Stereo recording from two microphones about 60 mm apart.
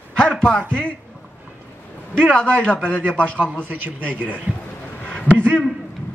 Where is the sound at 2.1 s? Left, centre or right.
Centre.